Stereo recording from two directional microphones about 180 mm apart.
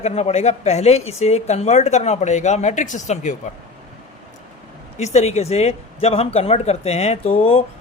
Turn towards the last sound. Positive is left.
turn(degrees=35)  # may be behind; listen again after turning